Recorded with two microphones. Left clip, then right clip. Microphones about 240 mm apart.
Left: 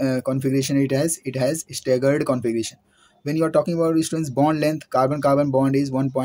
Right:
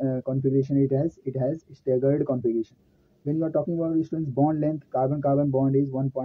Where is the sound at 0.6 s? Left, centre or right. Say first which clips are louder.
Left 2 dB; left.